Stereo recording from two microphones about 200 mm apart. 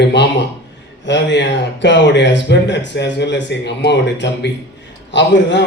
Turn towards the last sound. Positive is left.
turn(degrees=60)  # may be behind; listen again after turning